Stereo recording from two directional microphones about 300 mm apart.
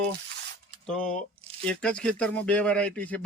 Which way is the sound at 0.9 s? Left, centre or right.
Centre.